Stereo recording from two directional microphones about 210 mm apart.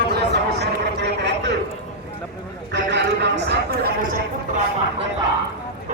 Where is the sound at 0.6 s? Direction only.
55° right (ahead or behind).